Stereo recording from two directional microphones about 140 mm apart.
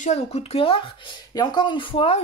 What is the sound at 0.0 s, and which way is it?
Speech, 50° left (ahead or behind).